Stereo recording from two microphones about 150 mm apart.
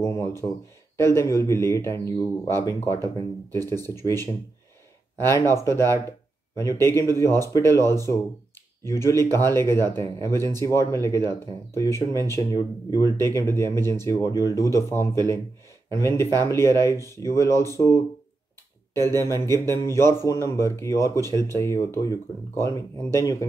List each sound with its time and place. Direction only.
0.0 s speech: 20° left (ahead or behind)
5.2 s speech: 20° left (ahead or behind)
9.2 s speech: 20° left (ahead or behind)
19.0 s speech: 20° left (ahead or behind)